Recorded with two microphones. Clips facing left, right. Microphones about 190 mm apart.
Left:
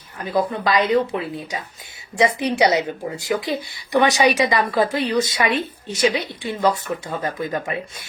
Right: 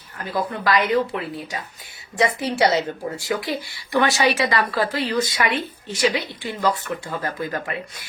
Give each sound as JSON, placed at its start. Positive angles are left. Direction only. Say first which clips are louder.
{"t": 0.3, "sound": "speech", "louder": "left 2 dB", "side_deg": 20}